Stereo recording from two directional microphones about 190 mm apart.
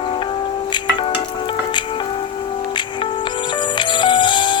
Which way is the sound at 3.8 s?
25° left (ahead or behind).